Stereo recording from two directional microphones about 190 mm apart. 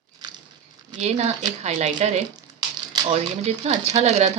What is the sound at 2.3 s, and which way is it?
Crumpling, 20° right (ahead or behind).